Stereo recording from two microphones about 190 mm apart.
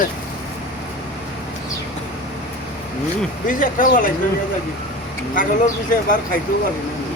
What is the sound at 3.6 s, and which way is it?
Speech, 45° left (ahead or behind).